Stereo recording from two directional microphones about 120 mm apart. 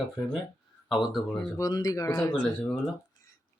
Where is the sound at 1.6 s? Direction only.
30° left (ahead or behind).